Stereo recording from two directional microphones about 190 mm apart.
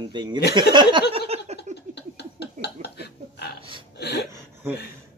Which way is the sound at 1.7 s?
60° left (ahead or behind).